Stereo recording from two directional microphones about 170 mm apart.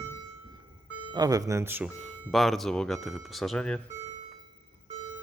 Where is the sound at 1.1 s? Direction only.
20° right (ahead or behind).